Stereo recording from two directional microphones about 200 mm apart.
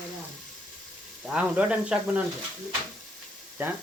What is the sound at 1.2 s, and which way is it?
Speech, 5° right (ahead or behind).